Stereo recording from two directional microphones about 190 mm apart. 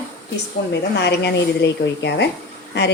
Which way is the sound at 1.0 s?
65° left (ahead or behind).